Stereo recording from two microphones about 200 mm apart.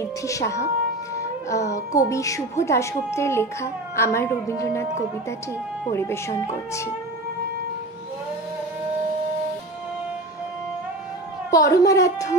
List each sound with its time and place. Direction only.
0.0 s speech: 15° left (ahead or behind)
5.9 s speech: 15° left (ahead or behind)
11.5 s speech: 15° left (ahead or behind)